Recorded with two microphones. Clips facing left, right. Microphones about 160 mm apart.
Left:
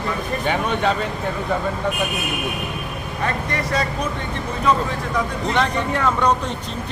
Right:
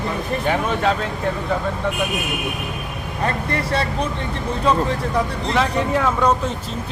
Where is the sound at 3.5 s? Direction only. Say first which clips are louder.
Right 1 dB; 30° right (ahead or behind).